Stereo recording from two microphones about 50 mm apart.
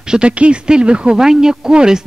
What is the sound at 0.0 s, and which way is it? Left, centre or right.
Speech, centre.